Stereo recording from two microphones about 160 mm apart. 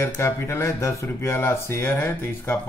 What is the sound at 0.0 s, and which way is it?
Speech, 15° left (ahead or behind).